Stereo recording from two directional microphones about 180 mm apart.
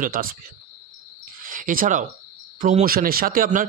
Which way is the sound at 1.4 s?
50° right (ahead or behind).